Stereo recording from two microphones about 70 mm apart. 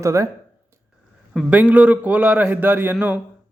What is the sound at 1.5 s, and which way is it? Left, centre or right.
A man's voice, centre.